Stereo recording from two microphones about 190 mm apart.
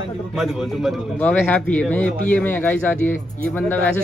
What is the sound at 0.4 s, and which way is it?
A man's voice, centre (ahead or behind).